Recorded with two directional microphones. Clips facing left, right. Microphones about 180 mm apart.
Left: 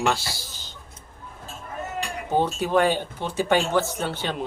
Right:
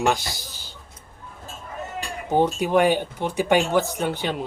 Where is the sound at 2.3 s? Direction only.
15° right (ahead or behind).